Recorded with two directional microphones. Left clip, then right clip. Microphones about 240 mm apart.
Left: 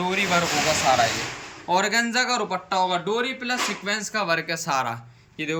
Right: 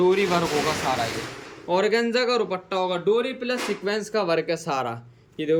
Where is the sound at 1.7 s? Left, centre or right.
Centre.